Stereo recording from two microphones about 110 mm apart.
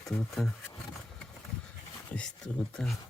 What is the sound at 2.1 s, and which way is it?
Speech, 10° left (ahead or behind).